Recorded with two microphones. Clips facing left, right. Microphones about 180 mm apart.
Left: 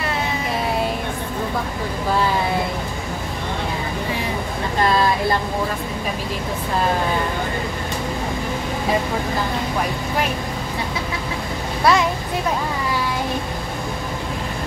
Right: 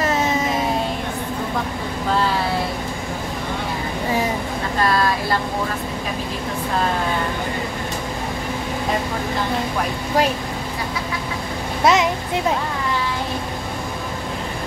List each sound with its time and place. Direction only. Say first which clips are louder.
11.8 s a child's voice: right 1 dB; 20° right (ahead or behind)